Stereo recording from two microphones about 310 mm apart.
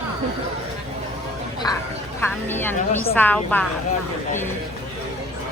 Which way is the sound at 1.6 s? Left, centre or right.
Centre.